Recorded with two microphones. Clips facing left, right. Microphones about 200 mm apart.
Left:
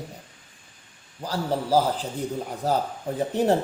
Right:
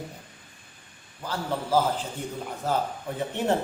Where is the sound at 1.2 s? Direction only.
35° left (ahead or behind).